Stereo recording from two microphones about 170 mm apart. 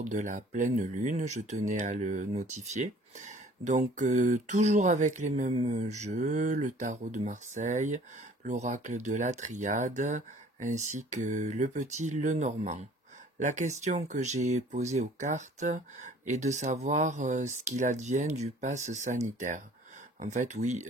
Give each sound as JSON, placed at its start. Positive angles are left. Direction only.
{"t": 0.0, "sound": "speech", "side_deg": -45}